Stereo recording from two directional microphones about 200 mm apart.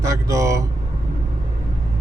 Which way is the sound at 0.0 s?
15° right (ahead or behind).